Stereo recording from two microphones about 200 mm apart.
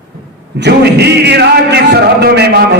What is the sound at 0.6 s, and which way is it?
A man's voice, 55° right (ahead or behind).